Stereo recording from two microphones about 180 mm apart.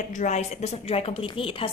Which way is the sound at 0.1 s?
40° left (ahead or behind).